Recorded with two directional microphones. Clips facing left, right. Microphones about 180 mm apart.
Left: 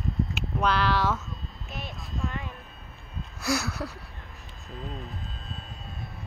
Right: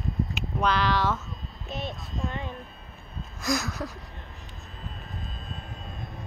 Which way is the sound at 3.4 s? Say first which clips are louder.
Even; 10° left (ahead or behind).